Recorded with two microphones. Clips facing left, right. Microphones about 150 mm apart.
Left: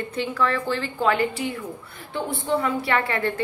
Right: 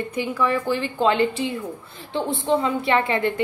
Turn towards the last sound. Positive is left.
turn(degrees=-20)  # may be behind; listen again after turning